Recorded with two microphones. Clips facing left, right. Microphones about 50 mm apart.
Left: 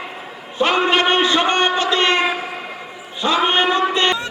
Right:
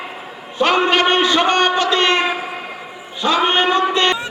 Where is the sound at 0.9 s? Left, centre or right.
Centre.